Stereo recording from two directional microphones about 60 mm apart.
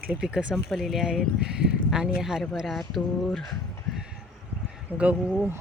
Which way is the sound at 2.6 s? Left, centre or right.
Centre.